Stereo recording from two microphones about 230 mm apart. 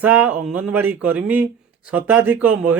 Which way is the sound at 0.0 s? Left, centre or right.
Centre.